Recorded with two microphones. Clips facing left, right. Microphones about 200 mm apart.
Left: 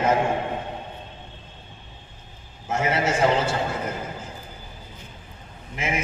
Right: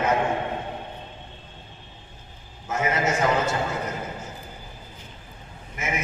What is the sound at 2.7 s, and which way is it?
Speech, 30° left (ahead or behind).